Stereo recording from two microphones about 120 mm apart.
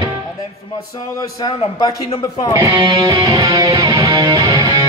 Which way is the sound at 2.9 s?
35° right (ahead or behind).